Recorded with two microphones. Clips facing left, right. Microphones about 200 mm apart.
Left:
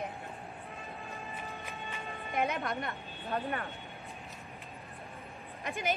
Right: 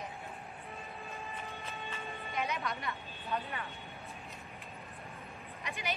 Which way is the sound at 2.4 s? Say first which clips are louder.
Left 5 dB; 55° left (ahead or behind).